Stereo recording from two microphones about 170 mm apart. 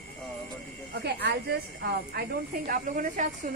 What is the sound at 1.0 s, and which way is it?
A woman's voice, 75° right (ahead or behind).